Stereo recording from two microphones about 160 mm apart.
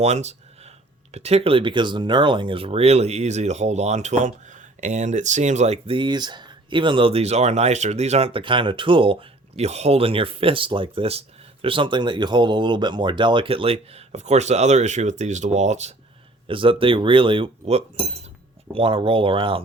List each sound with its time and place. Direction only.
0.0 s speech: 45° right (ahead or behind)
9.6 s speech: 45° right (ahead or behind)
16.5 s speech: 35° right (ahead or behind)